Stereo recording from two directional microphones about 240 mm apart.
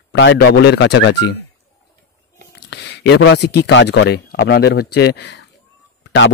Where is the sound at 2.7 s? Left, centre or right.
Left.